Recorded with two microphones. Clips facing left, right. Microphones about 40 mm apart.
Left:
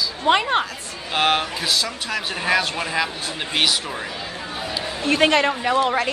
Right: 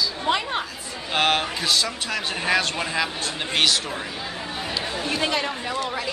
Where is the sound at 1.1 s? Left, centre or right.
Centre.